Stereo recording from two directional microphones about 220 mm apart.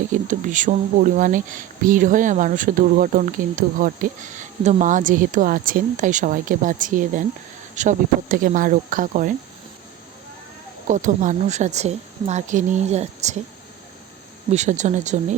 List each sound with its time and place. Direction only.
0.1 s speech: 35° right (ahead or behind)
10.8 s speech: 35° right (ahead or behind)
14.5 s speech: 30° right (ahead or behind)